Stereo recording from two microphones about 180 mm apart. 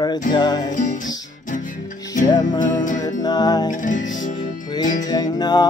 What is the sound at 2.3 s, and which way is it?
Music, 20° left (ahead or behind).